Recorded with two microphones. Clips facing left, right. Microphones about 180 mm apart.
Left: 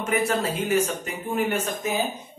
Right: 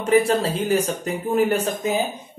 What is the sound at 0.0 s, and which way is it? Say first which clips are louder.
Speech: right 6 dB; 30° right (ahead or behind).